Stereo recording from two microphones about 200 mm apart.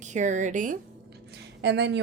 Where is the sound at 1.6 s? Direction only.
60° right (ahead or behind).